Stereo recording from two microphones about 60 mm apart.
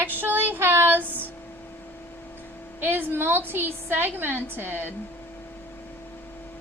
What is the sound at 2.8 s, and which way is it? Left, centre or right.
A woman's voice, right.